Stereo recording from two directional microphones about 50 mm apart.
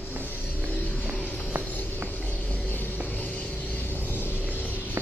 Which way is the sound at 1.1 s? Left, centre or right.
Left.